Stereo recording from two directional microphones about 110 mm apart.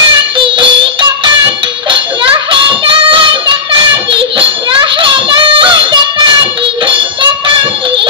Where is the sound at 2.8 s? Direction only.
50° right (ahead or behind).